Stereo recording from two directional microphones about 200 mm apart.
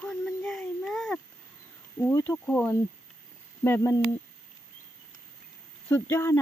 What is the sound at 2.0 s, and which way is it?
Speech, 10° left (ahead or behind).